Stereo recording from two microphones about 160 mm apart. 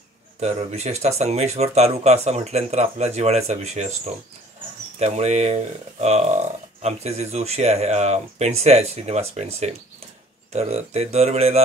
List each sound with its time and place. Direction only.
0.4 s speech: 45° right (ahead or behind)
4.9 s speech: 45° right (ahead or behind)